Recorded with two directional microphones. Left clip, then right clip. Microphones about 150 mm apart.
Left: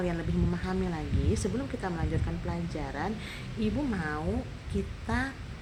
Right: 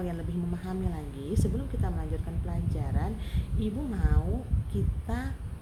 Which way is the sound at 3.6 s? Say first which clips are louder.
Left 4 dB; 15° right (ahead or behind).